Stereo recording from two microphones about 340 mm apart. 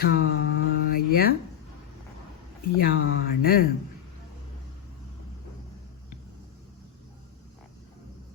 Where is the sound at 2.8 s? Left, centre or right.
Left.